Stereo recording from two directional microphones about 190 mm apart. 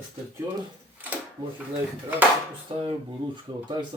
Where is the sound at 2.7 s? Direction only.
30° right (ahead or behind).